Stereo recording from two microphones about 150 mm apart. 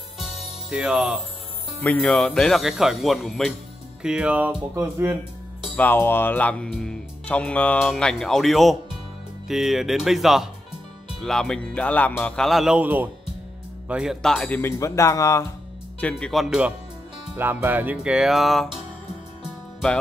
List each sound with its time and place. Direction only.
0.2 s music: 5° right (ahead or behind)
1.8 s speech: 10° left (ahead or behind); by 4.6 s 10° right (ahead or behind)
5.8 s speech: 15° left (ahead or behind)
14.6 s speech: 20° left (ahead or behind)
16.0 s speech: 5° left (ahead or behind)